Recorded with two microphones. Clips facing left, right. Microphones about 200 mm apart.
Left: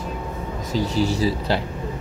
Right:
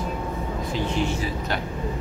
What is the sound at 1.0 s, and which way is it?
Speech, 35° left (ahead or behind).